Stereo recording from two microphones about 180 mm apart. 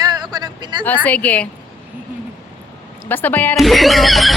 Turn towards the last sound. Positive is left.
turn(degrees=0)  # may be behind; listen again after turning